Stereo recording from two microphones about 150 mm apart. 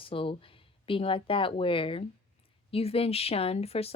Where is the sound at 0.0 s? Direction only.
35° left (ahead or behind).